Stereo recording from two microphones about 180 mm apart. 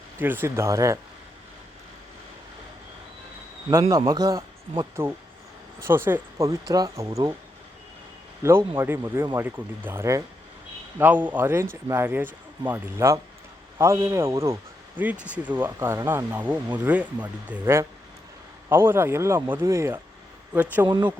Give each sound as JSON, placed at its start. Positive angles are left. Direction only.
{"t": 0.2, "sound": "speech", "side_deg": -10}
{"t": 3.7, "sound": "speech", "side_deg": -15}
{"t": 8.4, "sound": "speech", "side_deg": -15}
{"t": 20.8, "sound": "speech", "side_deg": -25}